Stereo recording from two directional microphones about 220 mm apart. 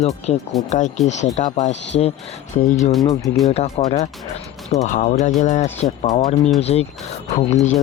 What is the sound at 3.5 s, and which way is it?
Speech, 30° left (ahead or behind).